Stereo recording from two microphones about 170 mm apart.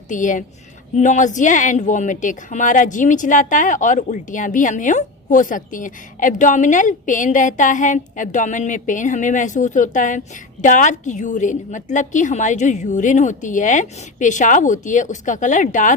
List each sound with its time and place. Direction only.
0.1 s speech: 50° left (ahead or behind)